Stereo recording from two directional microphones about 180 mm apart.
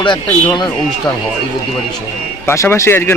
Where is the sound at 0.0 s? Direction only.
25° left (ahead or behind).